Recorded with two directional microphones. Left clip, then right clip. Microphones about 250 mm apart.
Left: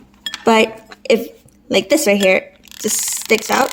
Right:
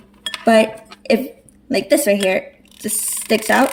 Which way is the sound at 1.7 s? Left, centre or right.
Left.